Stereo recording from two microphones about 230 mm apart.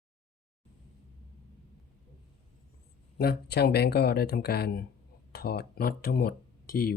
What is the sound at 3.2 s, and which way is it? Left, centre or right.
Speech, left.